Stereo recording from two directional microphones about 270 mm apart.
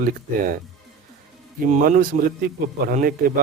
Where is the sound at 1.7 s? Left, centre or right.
Right.